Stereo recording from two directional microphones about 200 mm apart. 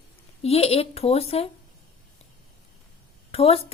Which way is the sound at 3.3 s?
30° left (ahead or behind).